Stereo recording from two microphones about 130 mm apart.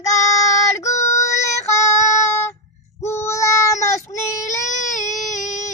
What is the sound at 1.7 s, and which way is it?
Child singing, 25° left (ahead or behind).